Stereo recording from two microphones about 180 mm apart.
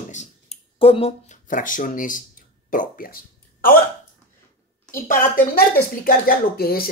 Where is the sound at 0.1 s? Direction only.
40° left (ahead or behind).